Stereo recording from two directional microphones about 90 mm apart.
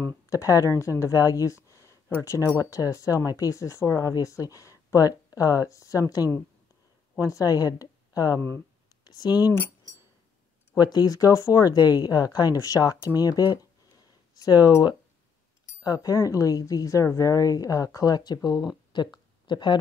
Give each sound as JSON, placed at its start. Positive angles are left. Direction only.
{"t": 0.3, "sound": "speech", "side_deg": 35}
{"t": 9.0, "sound": "a sound", "side_deg": 50}
{"t": 10.8, "sound": "speech", "side_deg": 50}